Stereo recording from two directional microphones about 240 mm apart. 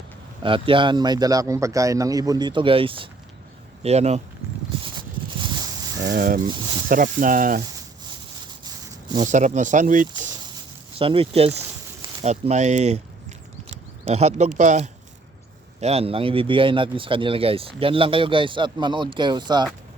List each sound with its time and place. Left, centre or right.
0.4 s a man's voice: right
4.8 s clip-clop: centre
6.0 s speech: right
9.2 s speech: right
10.9 s speech: right